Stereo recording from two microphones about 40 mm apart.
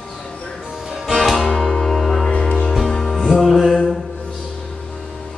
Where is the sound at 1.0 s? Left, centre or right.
Centre.